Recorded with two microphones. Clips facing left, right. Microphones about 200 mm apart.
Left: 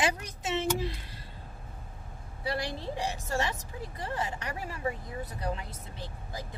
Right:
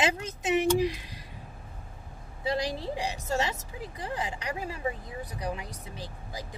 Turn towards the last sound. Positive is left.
turn(degrees=-15)  # may be behind; listen again after turning